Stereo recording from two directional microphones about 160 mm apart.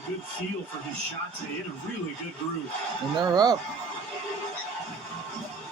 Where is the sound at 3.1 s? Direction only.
25° right (ahead or behind).